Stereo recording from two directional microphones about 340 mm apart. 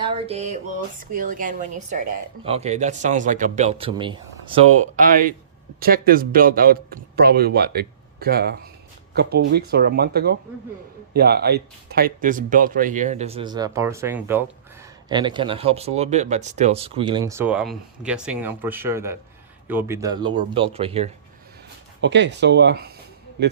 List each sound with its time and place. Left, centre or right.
0.0 s a sound: centre
1.1 s speech: right
22.0 s speech: right